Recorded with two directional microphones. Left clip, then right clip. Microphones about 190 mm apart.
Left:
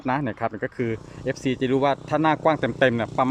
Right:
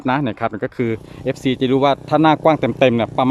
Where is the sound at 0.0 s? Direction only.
15° right (ahead or behind).